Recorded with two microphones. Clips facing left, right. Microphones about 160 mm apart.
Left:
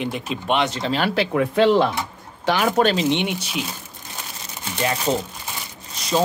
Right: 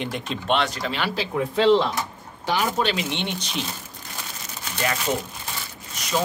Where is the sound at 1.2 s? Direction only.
65° left (ahead or behind).